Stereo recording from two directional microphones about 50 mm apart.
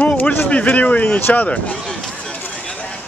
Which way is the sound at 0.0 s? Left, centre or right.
Left.